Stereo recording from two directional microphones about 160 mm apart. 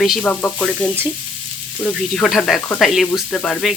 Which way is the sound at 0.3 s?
5° left (ahead or behind).